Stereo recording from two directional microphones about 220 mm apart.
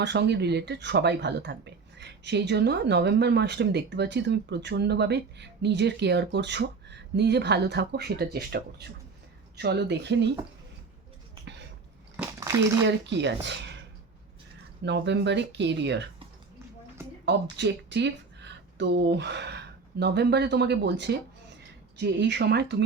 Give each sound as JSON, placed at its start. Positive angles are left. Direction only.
{"t": 0.0, "sound": "speech", "side_deg": -50}
{"t": 12.1, "sound": "a sound", "side_deg": -10}
{"t": 12.8, "sound": "speech", "side_deg": -55}
{"t": 14.8, "sound": "speech", "side_deg": -55}
{"t": 17.0, "sound": "a sound", "side_deg": -10}
{"t": 17.6, "sound": "speech", "side_deg": -50}